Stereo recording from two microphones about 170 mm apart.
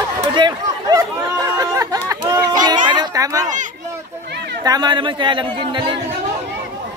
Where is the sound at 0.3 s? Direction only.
25° right (ahead or behind).